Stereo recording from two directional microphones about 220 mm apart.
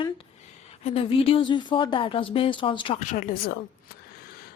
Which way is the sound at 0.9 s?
25° left (ahead or behind).